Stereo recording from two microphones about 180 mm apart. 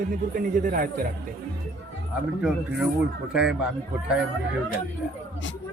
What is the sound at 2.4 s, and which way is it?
Speech, 5° right (ahead or behind).